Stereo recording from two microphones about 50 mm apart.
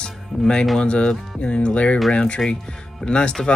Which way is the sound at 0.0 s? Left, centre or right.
Centre.